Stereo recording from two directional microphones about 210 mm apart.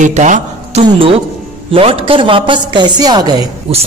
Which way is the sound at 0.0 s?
35° right (ahead or behind).